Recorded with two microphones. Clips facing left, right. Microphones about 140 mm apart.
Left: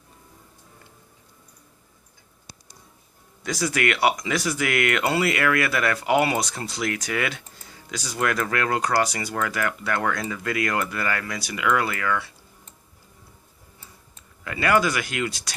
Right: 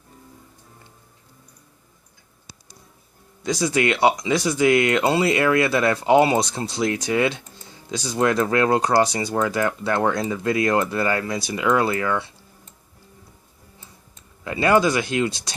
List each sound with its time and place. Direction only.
3.4 s speech: 20° right (ahead or behind)
14.4 s speech: 25° right (ahead or behind)